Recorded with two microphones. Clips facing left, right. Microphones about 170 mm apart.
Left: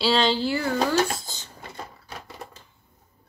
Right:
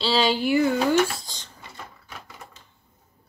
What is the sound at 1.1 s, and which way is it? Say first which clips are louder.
Dishes: left 2 dB; 5° left (ahead or behind).